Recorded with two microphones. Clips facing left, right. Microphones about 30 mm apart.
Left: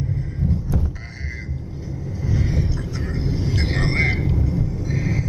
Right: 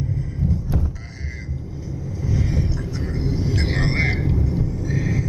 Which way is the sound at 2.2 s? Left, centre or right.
Centre.